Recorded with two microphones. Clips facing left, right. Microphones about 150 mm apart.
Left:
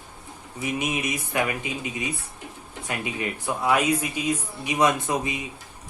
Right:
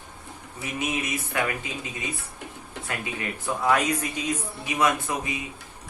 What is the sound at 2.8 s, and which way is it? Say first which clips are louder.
Speech: left 3 dB; 15° left (ahead or behind).